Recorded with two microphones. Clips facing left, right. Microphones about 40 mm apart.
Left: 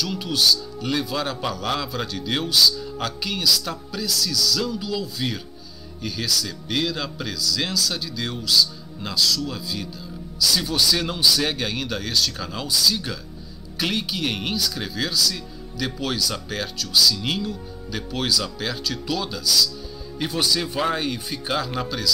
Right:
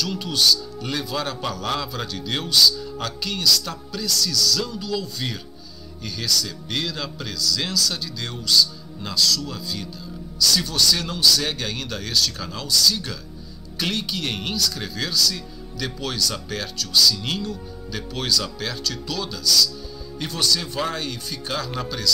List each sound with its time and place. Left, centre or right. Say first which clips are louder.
0.0 s speech: even; centre
21.6 s speech: left 1 dB; centre